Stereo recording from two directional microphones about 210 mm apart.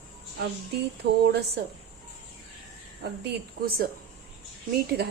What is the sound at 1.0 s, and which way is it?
Speech, 50° right (ahead or behind).